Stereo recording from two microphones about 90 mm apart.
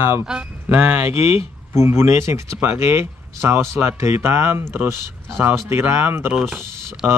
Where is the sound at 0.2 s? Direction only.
10° right (ahead or behind).